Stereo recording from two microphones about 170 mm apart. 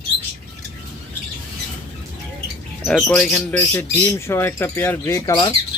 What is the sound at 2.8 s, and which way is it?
Speech, 5° left (ahead or behind).